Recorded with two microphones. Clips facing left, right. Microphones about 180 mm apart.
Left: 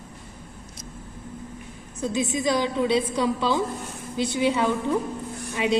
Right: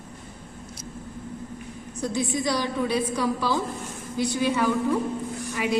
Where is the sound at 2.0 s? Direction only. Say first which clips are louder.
Left 2 dB; 20° left (ahead or behind).